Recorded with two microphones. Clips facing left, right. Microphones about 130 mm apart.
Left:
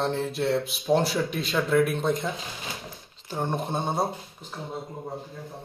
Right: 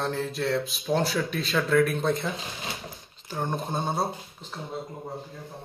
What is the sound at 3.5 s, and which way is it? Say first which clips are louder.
Speech: left 1 dB; 20° left (ahead or behind).